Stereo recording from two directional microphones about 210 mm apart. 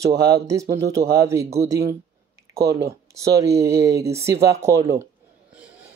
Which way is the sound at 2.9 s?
15° right (ahead or behind).